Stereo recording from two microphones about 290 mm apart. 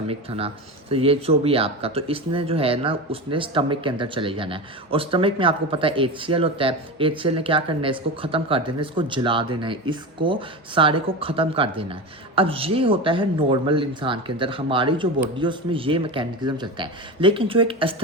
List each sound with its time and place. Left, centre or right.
0.1 s speech: centre